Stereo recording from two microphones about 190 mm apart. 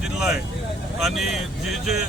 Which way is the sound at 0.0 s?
5° right (ahead or behind).